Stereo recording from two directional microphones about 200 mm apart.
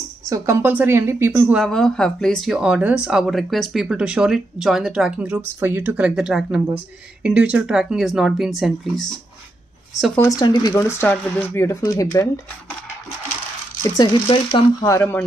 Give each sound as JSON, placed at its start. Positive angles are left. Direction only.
{"t": 0.3, "sound": "speech", "side_deg": -10}
{"t": 10.2, "sound": "speech", "side_deg": 20}
{"t": 13.9, "sound": "speech", "side_deg": 25}
{"t": 14.9, "sound": "speech", "side_deg": 10}